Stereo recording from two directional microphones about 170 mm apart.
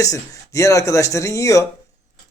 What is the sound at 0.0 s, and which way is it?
Speech, 20° left (ahead or behind).